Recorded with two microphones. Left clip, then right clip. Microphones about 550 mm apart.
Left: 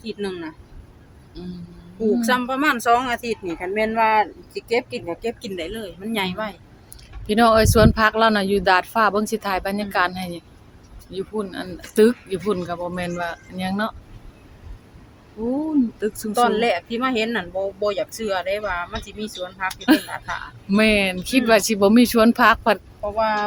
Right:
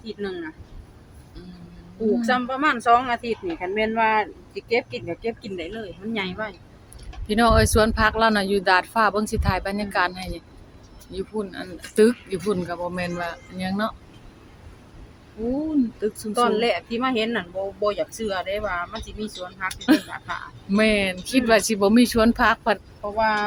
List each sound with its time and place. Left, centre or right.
0.0 s speech: left
1.4 s speech: left
2.2 s speech: left
7.3 s speech: left
16.0 s speech: left